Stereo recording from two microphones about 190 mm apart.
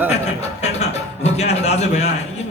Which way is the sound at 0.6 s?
35° left (ahead or behind).